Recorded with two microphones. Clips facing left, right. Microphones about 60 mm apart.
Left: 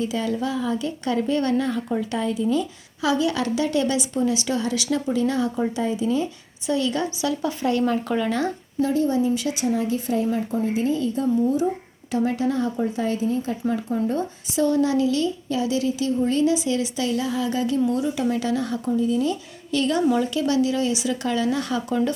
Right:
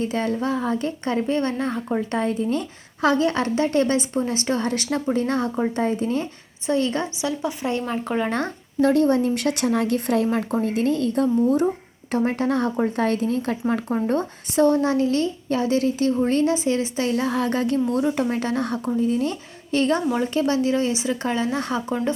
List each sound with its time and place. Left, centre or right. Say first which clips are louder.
0.0 s a woman's voice: right 1 dB; right
2.1 s a woman's voice: left 1 dB; right
6.7 s speech: right 1 dB; right
8.3 s speech: left 1 dB; right
8.9 s speech: right 2 dB; right
12.1 s a woman's voice: right 1 dB; right
13.1 s a woman's voice: right 1 dB; right